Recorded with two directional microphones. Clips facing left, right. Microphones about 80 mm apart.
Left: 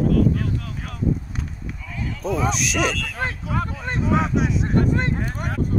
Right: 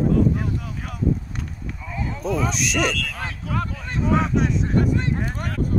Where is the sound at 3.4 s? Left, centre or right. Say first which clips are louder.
Left 1 dB; centre.